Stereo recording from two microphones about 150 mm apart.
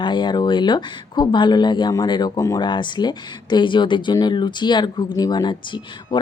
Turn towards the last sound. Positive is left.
turn(degrees=30)  # may be behind; listen again after turning